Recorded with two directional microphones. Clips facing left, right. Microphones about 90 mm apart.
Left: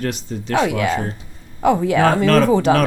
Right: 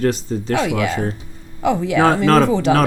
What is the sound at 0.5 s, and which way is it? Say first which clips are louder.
A woman's voice: left 2 dB; 40° left (ahead or behind).